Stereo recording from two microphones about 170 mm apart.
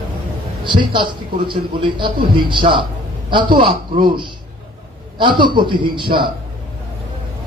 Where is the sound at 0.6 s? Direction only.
30° right (ahead or behind).